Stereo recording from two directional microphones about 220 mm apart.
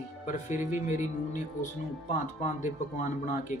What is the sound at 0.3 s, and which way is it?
Speech, 35° left (ahead or behind).